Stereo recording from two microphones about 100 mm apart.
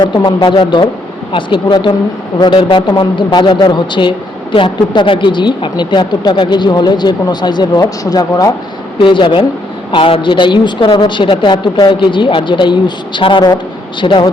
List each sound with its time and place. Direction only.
0.0 s a woman's voice: 45° left (ahead or behind)
9.0 s a woman's voice: 55° left (ahead or behind)